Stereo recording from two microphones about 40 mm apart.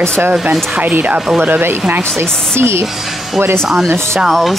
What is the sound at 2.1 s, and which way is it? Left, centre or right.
Speech, right.